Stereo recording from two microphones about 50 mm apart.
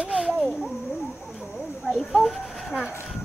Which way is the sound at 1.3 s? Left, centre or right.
Centre.